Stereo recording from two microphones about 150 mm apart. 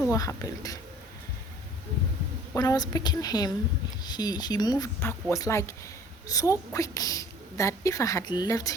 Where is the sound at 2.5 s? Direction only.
25° left (ahead or behind).